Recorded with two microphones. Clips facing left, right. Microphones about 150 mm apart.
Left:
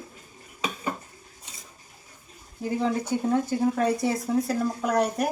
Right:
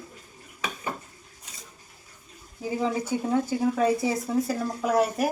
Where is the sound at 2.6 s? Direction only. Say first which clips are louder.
Left 1 dB; 5° right (ahead or behind).